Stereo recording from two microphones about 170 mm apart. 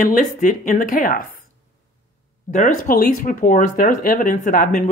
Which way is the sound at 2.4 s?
50° left (ahead or behind).